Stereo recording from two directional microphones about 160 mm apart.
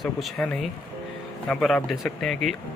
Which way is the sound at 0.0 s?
Centre (ahead or behind).